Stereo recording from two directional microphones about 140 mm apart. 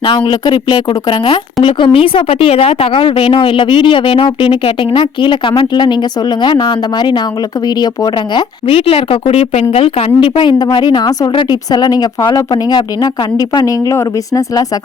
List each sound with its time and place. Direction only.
0.0 s a woman's voice: 35° left (ahead or behind)
8.6 s a woman's voice: 45° left (ahead or behind); by 14.6 s 20° left (ahead or behind)